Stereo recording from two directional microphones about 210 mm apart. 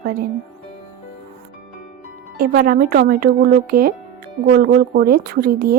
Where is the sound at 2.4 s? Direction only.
45° right (ahead or behind).